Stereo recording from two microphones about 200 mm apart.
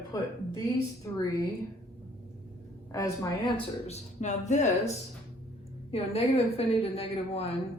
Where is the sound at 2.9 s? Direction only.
15° left (ahead or behind).